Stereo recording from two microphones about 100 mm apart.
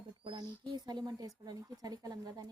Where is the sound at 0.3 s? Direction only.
45° right (ahead or behind).